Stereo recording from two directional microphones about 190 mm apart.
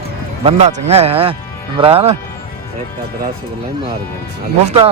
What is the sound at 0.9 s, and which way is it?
Speech, 30° right (ahead or behind).